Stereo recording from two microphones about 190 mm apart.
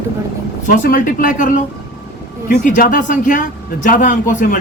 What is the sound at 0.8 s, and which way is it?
Speech, 45° left (ahead or behind).